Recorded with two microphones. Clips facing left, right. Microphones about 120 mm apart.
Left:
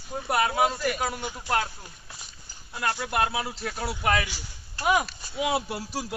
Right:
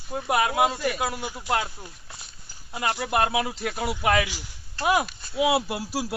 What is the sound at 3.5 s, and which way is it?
Speech, 10° right (ahead or behind).